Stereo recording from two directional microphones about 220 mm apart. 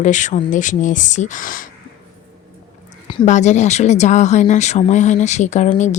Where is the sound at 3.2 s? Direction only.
30° left (ahead or behind).